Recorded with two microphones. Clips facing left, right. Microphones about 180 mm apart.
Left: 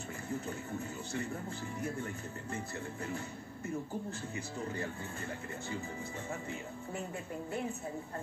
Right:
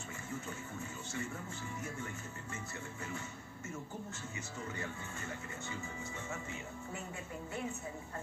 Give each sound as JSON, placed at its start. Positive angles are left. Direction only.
{"t": 0.3, "sound": "music", "side_deg": 35}